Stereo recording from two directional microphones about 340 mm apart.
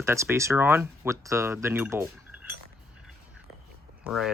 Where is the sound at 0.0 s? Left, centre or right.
Centre.